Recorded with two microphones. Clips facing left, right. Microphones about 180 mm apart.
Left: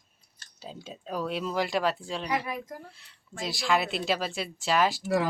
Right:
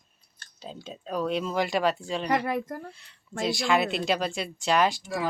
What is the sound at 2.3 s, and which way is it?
Speech, 65° right (ahead or behind).